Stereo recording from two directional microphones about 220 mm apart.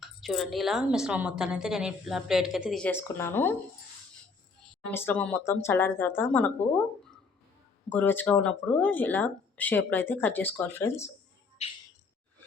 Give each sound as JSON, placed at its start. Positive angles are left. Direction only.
{"t": 0.0, "sound": "a woman's voice", "side_deg": 0}
{"t": 4.9, "sound": "speech", "side_deg": 10}
{"t": 11.6, "sound": "a sound", "side_deg": 30}